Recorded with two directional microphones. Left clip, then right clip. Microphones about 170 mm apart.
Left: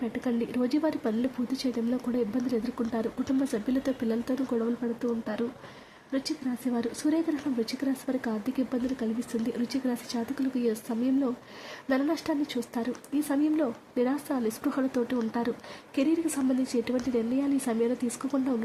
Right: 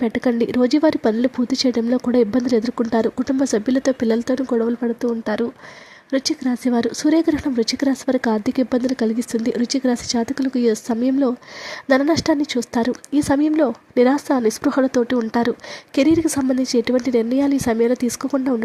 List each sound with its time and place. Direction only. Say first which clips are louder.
0.0 s speech: right 12 dB; 45° right (ahead or behind)